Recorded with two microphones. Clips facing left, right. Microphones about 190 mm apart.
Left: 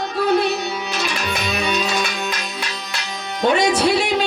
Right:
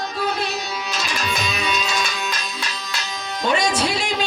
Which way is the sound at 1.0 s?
60° left (ahead or behind).